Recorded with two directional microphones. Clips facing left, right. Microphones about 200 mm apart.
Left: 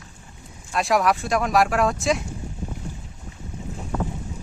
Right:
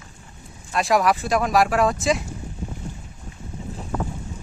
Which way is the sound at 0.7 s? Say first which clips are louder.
Right 1 dB; centre (ahead or behind).